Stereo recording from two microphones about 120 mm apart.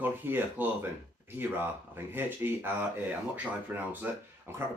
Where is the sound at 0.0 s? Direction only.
15° right (ahead or behind).